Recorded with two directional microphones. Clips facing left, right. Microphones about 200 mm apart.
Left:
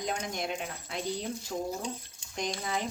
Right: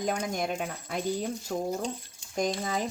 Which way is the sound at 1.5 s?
65° right (ahead or behind).